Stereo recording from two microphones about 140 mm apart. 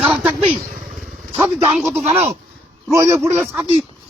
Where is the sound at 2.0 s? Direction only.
50° right (ahead or behind).